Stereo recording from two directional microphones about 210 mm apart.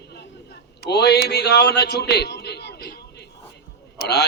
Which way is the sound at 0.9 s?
50° left (ahead or behind).